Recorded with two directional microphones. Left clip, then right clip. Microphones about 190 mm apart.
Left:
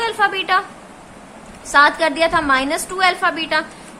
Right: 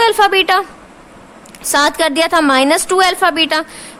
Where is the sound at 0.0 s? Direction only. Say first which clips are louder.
Right 8 dB; 60° right (ahead or behind).